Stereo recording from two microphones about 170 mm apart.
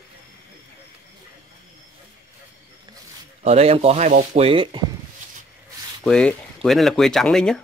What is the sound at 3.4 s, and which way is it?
Speech, 40° right (ahead or behind).